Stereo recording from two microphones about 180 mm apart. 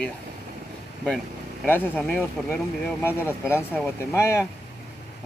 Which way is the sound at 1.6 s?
10° left (ahead or behind).